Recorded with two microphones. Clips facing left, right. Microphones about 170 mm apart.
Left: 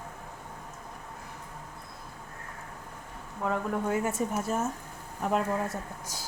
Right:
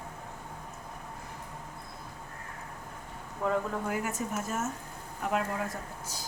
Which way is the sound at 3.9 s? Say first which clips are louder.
Left 4 dB; 30° left (ahead or behind).